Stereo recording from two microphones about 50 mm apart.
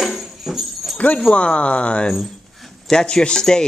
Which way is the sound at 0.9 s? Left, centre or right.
Left.